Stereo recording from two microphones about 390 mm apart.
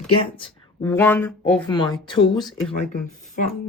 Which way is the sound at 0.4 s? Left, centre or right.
Centre.